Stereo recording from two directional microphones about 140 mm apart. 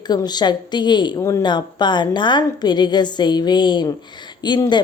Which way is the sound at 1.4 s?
30° left (ahead or behind).